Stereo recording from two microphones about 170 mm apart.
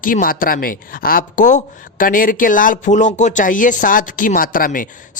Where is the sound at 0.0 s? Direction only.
55° left (ahead or behind).